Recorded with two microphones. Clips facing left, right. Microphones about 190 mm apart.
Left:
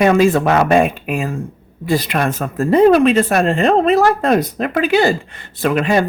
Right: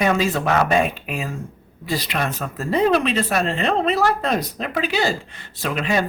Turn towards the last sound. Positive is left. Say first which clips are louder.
# left 7 dB
turn(degrees=55)  # may be behind; listen again after turning